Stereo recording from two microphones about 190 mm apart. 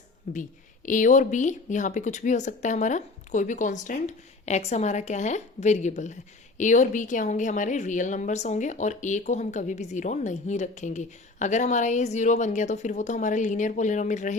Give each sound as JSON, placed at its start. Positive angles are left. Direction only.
{"t": 0.3, "sound": "a woman's voice", "side_deg": 45}